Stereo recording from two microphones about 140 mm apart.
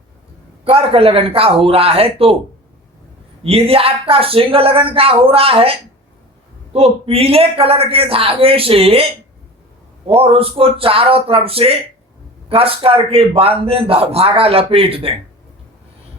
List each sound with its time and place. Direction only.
0.6 s a man's voice: 40° right (ahead or behind)
3.4 s a man's voice: 45° right (ahead or behind)
6.7 s a man's voice: 45° right (ahead or behind)
10.1 s a man's voice: 45° right (ahead or behind)